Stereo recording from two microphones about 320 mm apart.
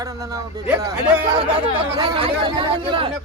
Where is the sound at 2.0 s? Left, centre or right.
Centre.